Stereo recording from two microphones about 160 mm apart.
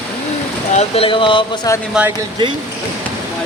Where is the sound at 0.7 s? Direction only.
40° left (ahead or behind).